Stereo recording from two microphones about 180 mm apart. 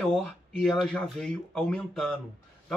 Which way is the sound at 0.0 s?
Centre (ahead or behind).